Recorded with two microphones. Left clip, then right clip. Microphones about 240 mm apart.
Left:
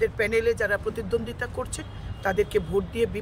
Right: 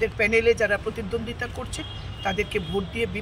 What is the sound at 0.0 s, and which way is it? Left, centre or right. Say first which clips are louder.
Speech: right 2 dB; left.